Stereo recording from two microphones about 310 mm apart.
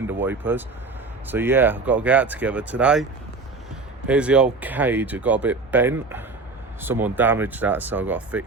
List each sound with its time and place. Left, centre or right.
0.1 s speech: centre